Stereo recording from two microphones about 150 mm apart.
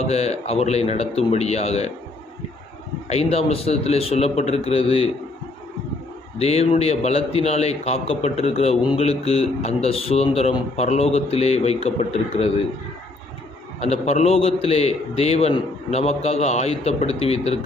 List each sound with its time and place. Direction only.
0.0 s a man's voice: 45° left (ahead or behind)
3.1 s a man's voice: 45° left (ahead or behind)
6.4 s a man's voice: 45° left (ahead or behind)
13.7 s a man's voice: 45° left (ahead or behind)